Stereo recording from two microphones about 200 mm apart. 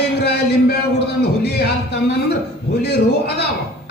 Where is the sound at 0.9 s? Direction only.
55° left (ahead or behind).